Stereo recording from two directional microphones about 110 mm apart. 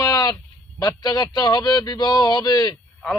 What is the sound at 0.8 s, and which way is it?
A man's voice, 35° left (ahead or behind).